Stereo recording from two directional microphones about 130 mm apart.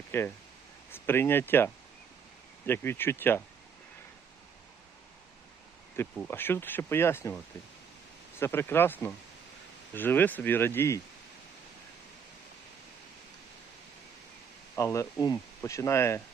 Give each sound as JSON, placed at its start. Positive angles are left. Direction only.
{"t": 0.1, "sound": "speech", "side_deg": 20}
{"t": 6.1, "sound": "speech", "side_deg": 15}
{"t": 14.8, "sound": "speech", "side_deg": 25}